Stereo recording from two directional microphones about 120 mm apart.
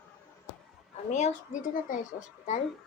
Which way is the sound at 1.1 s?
85° left.